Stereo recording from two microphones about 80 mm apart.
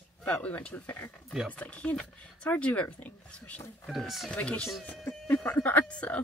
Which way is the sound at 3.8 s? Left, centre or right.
Centre.